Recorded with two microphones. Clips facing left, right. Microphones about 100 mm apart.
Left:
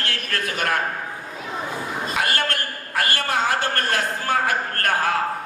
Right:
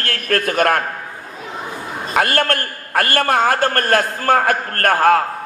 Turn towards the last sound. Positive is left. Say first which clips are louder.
# right 8 dB
turn(degrees=-50)  # may be behind; listen again after turning